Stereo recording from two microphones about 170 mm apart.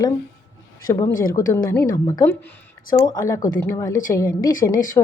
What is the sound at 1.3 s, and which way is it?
A woman's voice, 15° left (ahead or behind).